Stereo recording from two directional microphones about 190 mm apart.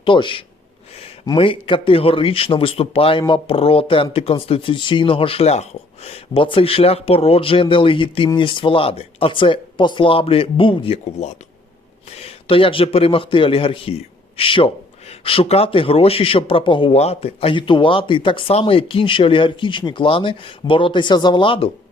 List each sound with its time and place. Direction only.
0.0 s speech: 25° left (ahead or behind)